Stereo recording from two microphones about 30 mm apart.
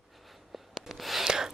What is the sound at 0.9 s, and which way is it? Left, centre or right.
Gasp, centre.